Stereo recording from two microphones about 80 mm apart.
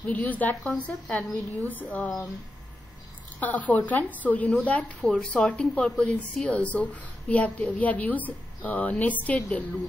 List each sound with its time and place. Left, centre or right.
0.1 s a woman's voice: left
2.0 s a woman's voice: centre
3.3 s a woman's voice: centre